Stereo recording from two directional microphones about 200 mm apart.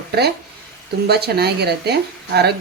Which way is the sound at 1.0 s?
55° right (ahead or behind).